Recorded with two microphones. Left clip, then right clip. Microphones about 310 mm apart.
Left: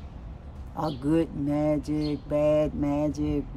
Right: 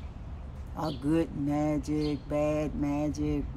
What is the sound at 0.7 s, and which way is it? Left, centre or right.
Speech, centre.